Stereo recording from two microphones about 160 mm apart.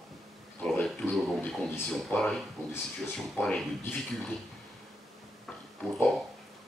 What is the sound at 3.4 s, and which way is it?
Speech, 5° left (ahead or behind).